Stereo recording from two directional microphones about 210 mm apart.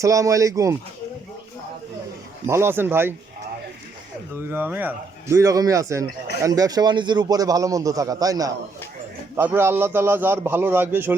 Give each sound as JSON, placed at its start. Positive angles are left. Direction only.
{"t": 0.0, "sound": "a man's voice", "side_deg": -15}
{"t": 2.5, "sound": "a man's voice", "side_deg": -10}
{"t": 4.4, "sound": "a man's voice", "side_deg": -10}